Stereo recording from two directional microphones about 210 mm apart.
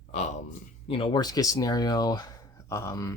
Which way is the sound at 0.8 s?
25° left (ahead or behind).